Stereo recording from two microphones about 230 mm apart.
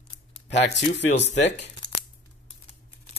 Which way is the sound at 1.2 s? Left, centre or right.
Left.